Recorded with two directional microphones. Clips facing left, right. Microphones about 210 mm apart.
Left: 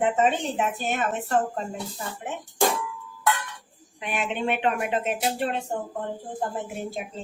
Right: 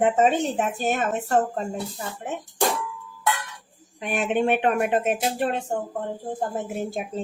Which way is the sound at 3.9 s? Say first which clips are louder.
Right 5 dB; 45° right (ahead or behind).